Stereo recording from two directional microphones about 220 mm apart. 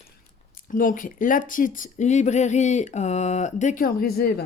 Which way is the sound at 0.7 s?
40° left (ahead or behind).